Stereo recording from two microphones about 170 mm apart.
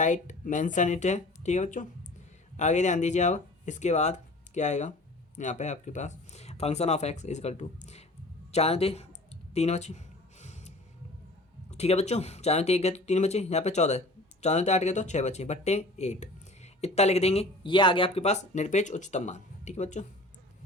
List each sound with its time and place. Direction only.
0.0 s speech: 45° left (ahead or behind)
10.4 s music: 45° left (ahead or behind)
11.7 s speech: 40° left (ahead or behind)